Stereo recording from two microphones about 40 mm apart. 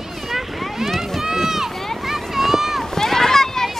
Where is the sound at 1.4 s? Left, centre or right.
Centre.